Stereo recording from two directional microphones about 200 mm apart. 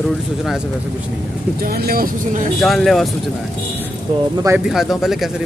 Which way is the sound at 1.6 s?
50° right (ahead or behind).